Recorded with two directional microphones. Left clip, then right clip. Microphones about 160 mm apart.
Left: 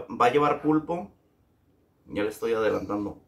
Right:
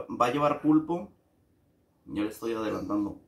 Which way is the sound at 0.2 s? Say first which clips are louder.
Left 4 dB; 20° left (ahead or behind).